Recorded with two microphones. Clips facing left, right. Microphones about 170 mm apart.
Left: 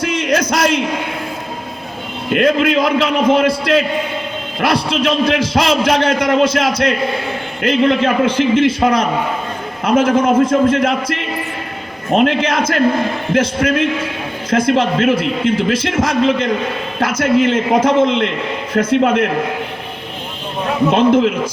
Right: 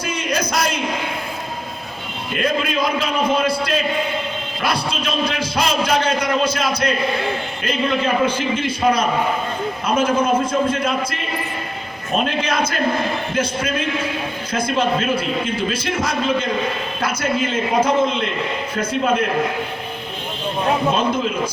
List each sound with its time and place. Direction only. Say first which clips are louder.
0.0 s a sound: left 6 dB; 90° left
2.3 s a man's voice: left 8 dB; 80° left
20.9 s a man's voice: left 8 dB; 90° left